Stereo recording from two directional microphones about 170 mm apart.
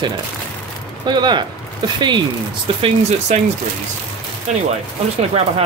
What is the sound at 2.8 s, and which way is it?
Speech, 40° right (ahead or behind).